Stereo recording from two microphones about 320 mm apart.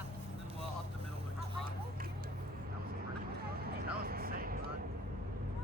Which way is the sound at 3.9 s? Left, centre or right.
Right.